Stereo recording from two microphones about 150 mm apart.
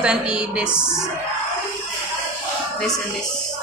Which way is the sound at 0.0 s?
5° right (ahead or behind).